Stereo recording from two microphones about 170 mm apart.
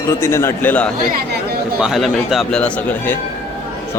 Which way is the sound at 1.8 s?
Centre (ahead or behind).